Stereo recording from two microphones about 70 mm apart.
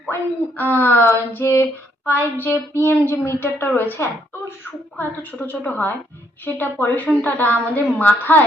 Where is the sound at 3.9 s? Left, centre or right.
Left.